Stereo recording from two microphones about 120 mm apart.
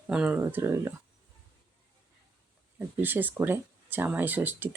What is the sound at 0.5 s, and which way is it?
Speech, 20° right (ahead or behind).